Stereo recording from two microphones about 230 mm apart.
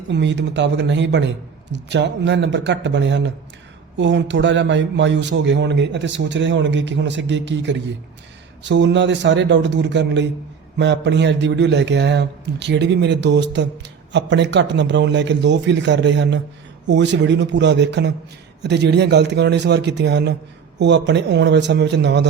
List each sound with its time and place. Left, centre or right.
0.1 s a man's voice: right